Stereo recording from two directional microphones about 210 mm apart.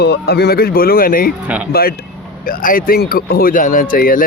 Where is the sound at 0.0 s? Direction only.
50° left (ahead or behind).